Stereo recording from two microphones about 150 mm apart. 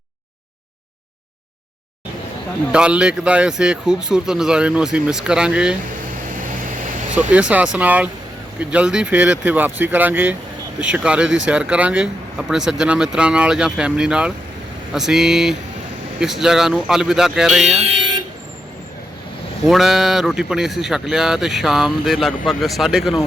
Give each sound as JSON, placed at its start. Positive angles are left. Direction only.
{"t": 2.7, "sound": "speech", "side_deg": -5}
{"t": 7.2, "sound": "speech", "side_deg": -10}
{"t": 17.8, "sound": "vehicle", "side_deg": -35}
{"t": 19.6, "sound": "speech", "side_deg": 0}